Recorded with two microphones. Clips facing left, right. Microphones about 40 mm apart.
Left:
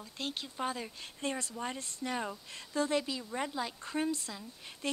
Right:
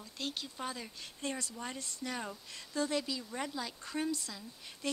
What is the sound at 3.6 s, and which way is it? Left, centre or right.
Speech, left.